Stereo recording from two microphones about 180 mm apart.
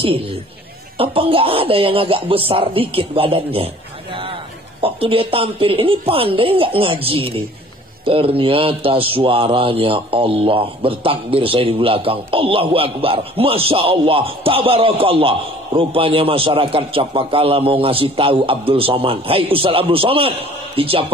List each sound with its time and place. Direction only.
0.9 s speech: 30° right (ahead or behind)
4.8 s speech: 30° right (ahead or behind)